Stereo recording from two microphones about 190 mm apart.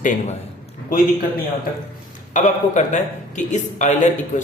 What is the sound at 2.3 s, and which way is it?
Speech, 40° left (ahead or behind).